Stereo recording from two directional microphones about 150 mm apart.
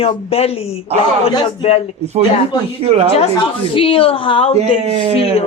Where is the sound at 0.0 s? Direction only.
40° left (ahead or behind).